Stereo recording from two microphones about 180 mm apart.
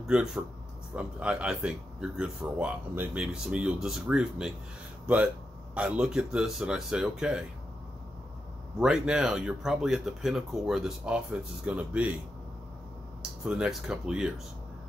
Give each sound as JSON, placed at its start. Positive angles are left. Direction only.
{"t": 0.0, "sound": "speech", "side_deg": -5}
{"t": 8.7, "sound": "speech", "side_deg": -5}
{"t": 13.4, "sound": "speech", "side_deg": -5}